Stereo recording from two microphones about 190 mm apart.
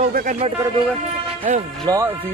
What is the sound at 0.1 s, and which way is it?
Speech, 45° right (ahead or behind).